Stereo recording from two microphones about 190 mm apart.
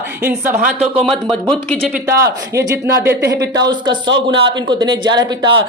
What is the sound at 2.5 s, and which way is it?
Speech, 15° right (ahead or behind).